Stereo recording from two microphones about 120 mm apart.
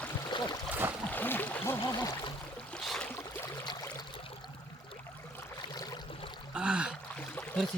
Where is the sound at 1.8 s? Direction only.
30° left (ahead or behind).